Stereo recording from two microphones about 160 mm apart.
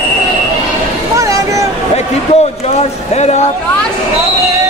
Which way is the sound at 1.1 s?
20° right (ahead or behind).